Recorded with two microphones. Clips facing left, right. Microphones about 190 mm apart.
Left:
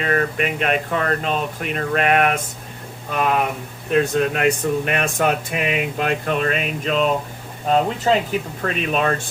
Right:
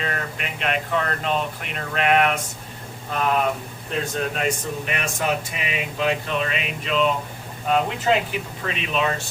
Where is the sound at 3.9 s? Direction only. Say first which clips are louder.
Left 8 dB; 65° left (ahead or behind).